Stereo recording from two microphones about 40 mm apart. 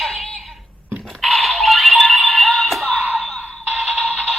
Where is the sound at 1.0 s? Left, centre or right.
Centre.